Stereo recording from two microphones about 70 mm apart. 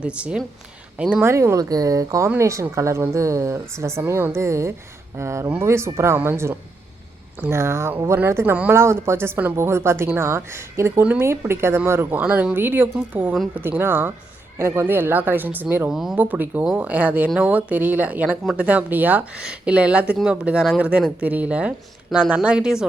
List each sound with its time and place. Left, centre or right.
0.0 s speech: centre
1.2 s a woman's voice: right
1.5 s speech: right
2.4 s a woman's voice: right
12.2 s speech: centre
12.5 s a woman's voice: right
15.9 s speech: centre
16.1 s speech: right